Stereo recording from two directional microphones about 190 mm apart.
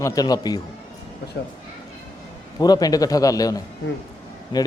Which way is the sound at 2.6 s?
20° left (ahead or behind).